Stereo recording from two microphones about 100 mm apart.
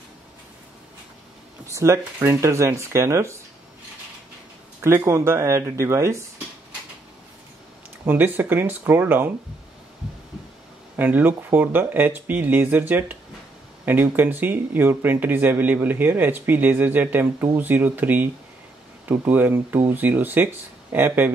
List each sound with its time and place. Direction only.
1.7 s speech: 30° right (ahead or behind)
4.8 s speech: 25° right (ahead or behind)
8.1 s speech: 20° right (ahead or behind)
11.0 s speech: 20° right (ahead or behind)